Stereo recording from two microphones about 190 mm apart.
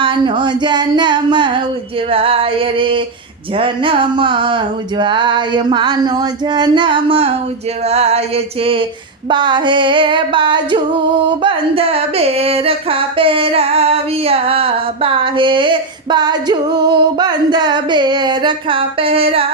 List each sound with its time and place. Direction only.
0.0 s singing: 25° right (ahead or behind)
7.9 s a sound: 35° right (ahead or behind)
9.3 s singing: 25° right (ahead or behind)